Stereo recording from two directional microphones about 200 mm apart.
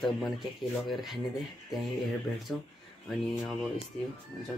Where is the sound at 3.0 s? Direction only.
Centre (ahead or behind).